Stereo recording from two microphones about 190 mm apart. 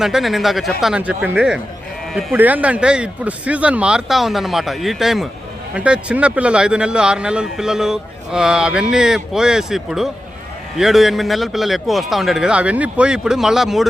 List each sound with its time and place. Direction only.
0.0 s speech: centre (ahead or behind)